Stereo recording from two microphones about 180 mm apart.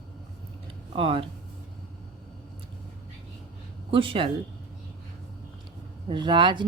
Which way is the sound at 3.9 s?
30° right (ahead or behind).